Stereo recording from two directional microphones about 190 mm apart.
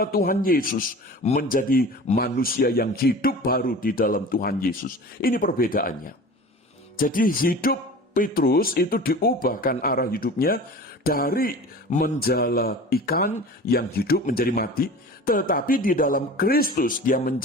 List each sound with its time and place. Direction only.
0.0 s a man's voice: 50° left (ahead or behind)